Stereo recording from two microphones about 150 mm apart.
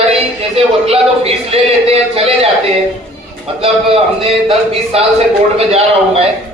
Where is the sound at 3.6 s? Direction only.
40° right (ahead or behind).